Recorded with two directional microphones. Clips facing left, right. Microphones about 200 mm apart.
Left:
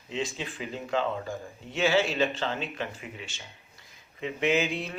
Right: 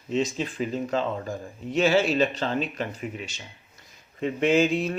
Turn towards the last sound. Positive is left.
turn(degrees=-45)  # may be behind; listen again after turning